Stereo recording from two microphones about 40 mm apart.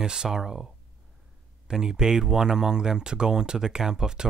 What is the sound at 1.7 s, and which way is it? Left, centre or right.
Speech, centre.